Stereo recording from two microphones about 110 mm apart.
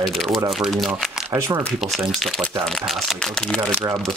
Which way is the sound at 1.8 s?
Centre (ahead or behind).